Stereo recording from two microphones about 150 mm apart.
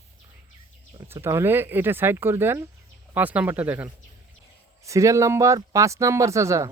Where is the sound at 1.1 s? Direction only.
15° right (ahead or behind).